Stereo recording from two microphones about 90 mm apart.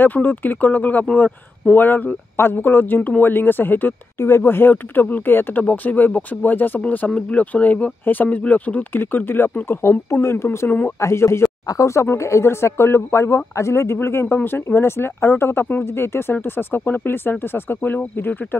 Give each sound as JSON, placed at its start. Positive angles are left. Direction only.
{"t": 0.0, "sound": "speech", "side_deg": 20}